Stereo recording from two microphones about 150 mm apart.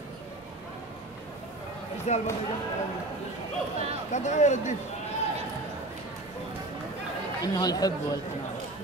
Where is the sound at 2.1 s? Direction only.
50° left (ahead or behind).